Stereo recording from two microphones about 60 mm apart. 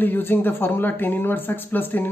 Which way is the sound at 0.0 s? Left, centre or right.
Left.